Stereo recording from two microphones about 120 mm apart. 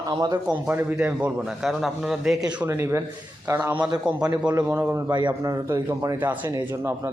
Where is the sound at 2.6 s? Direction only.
20° right (ahead or behind).